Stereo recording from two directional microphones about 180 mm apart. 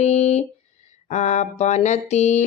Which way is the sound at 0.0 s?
35° left (ahead or behind).